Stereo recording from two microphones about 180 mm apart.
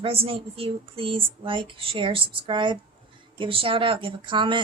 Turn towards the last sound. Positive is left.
turn(degrees=-25)  # may be behind; listen again after turning